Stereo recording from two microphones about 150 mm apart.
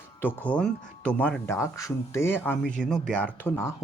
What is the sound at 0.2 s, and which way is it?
Speech, 15° left (ahead or behind).